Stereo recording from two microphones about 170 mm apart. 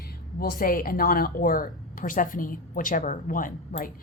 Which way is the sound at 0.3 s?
60° left (ahead or behind).